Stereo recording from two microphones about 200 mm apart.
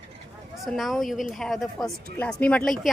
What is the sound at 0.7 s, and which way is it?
A woman's voice, centre (ahead or behind).